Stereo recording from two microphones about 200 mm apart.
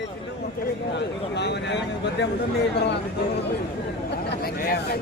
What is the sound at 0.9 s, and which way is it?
Speech, 60° left (ahead or behind).